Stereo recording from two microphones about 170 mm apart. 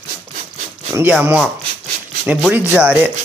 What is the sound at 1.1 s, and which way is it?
Speech, 5° right (ahead or behind).